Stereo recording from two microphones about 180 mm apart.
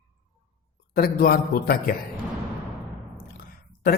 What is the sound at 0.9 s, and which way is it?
A man's voice, 55° left (ahead or behind).